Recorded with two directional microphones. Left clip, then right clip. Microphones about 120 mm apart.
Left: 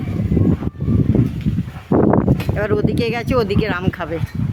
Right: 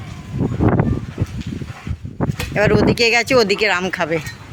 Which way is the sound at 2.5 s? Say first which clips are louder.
Right 7 dB; 5° right (ahead or behind).